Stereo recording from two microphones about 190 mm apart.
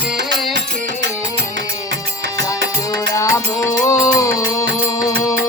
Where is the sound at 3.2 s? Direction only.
15° left (ahead or behind).